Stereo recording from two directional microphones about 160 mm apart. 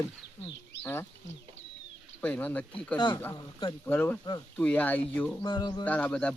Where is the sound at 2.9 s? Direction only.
30° left (ahead or behind).